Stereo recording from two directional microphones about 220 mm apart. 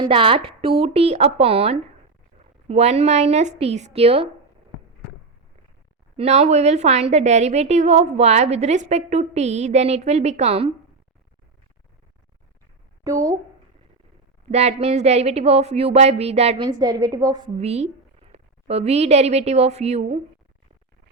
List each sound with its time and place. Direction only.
0.0 s speech: 25° right (ahead or behind)
6.1 s a woman's voice: 30° right (ahead or behind)
13.1 s a woman's voice: 15° right (ahead or behind)
14.5 s speech: 30° right (ahead or behind)